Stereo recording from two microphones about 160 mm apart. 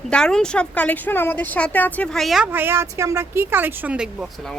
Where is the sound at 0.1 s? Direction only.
5° left (ahead or behind).